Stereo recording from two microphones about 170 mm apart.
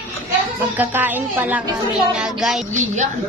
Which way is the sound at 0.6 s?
10° right (ahead or behind).